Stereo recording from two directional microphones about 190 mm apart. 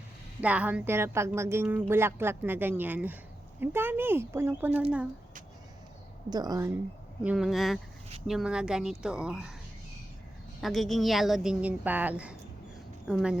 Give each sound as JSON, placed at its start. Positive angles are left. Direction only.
{"t": 0.4, "sound": "speech", "side_deg": -5}
{"t": 6.3, "sound": "speech", "side_deg": -20}
{"t": 7.2, "sound": "speech", "side_deg": -5}
{"t": 10.6, "sound": "speech", "side_deg": 0}